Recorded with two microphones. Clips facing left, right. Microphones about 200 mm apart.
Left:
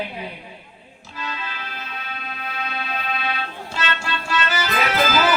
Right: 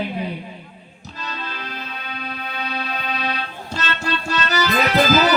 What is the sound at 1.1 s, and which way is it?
Music, 40° right (ahead or behind).